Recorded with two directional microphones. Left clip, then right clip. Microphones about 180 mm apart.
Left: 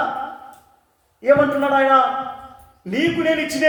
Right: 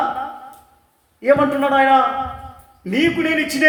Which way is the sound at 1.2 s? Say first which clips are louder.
Even; 35° right (ahead or behind).